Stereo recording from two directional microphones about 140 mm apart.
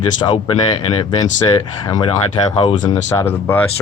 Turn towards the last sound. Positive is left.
turn(degrees=15)  # may be behind; listen again after turning